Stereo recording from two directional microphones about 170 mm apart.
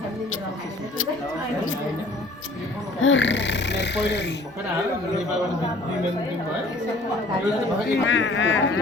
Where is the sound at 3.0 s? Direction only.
90° left.